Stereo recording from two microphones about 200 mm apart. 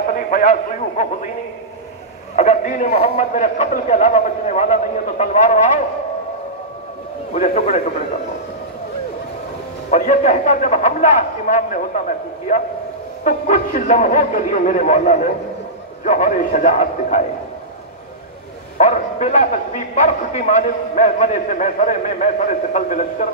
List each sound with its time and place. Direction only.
0.1 s a man's voice: 40° left (ahead or behind)
2.3 s a man's voice: 35° left (ahead or behind)
7.3 s a man's voice: 40° left (ahead or behind)
9.8 s a man's voice: 40° left (ahead or behind)
13.2 s a man's voice: 40° left (ahead or behind)
18.8 s a man's voice: 35° left (ahead or behind)